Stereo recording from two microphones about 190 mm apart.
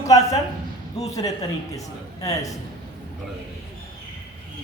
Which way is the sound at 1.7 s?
20° left (ahead or behind).